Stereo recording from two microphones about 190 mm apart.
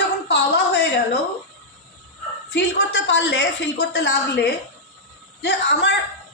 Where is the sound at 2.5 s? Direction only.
65° left (ahead or behind).